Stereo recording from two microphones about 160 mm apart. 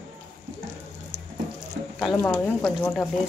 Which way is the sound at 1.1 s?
60° right (ahead or behind).